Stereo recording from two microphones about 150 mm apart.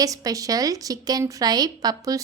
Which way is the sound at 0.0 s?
25° right (ahead or behind).